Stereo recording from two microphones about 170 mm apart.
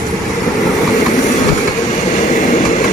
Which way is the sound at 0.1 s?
Centre (ahead or behind).